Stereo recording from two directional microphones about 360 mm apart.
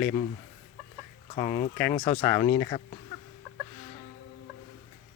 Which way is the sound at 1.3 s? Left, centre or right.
Left.